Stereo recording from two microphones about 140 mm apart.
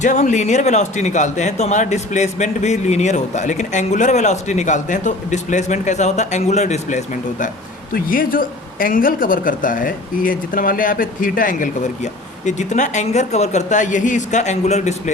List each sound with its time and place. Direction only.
0.0 s speech: 60° left (ahead or behind)
7.9 s speech: 90° left; by 11.9 s 70° left (ahead or behind)
12.5 s speech: 60° left (ahead or behind)